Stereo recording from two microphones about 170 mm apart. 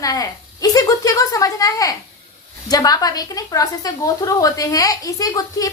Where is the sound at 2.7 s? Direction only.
20° left (ahead or behind).